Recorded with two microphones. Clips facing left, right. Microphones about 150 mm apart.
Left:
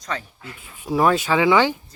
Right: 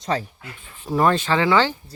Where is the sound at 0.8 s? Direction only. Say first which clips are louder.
Left 1 dB; 10° left (ahead or behind).